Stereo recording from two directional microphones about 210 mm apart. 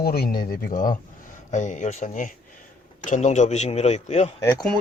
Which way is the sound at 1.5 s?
35° left (ahead or behind).